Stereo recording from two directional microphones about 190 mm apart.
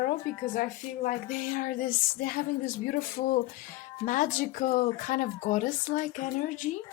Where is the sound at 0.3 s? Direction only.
40° left (ahead or behind).